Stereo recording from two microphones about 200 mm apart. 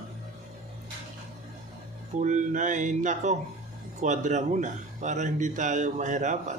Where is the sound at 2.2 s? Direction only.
40° right (ahead or behind).